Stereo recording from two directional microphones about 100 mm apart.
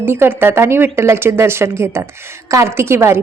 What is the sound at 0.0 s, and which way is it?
A woman's voice, 20° right (ahead or behind).